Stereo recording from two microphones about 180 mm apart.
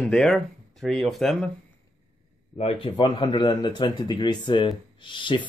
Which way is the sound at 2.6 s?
35° left (ahead or behind).